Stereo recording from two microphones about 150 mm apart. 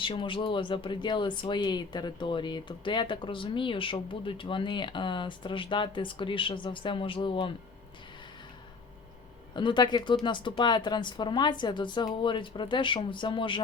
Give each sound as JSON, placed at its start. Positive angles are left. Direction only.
{"t": 0.0, "sound": "speech", "side_deg": 35}
{"t": 9.6, "sound": "speech", "side_deg": 30}